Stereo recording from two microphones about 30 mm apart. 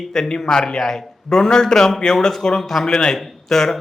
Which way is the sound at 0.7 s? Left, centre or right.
Centre.